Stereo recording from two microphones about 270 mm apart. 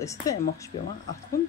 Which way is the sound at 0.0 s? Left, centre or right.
Centre.